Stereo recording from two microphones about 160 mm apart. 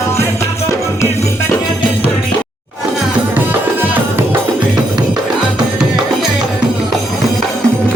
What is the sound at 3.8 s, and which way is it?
Music, 15° right (ahead or behind).